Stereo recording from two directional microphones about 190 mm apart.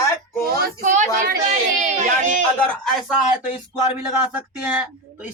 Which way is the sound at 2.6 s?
5° left (ahead or behind).